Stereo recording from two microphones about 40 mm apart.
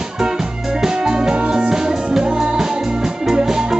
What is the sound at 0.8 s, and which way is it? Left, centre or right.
Music, centre.